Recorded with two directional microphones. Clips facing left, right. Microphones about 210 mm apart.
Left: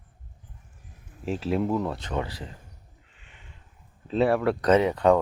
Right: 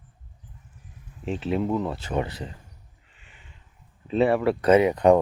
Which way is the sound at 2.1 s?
20° right (ahead or behind).